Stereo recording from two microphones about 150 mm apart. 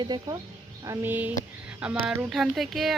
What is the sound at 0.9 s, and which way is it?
Speech, 10° right (ahead or behind).